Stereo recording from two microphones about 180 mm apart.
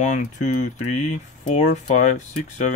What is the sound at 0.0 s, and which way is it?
Speech, 45° left (ahead or behind).